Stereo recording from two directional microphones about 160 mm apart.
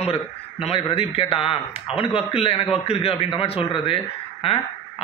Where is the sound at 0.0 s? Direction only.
40° left (ahead or behind).